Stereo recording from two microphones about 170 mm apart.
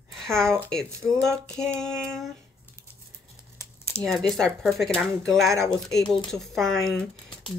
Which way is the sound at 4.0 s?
5° left (ahead or behind).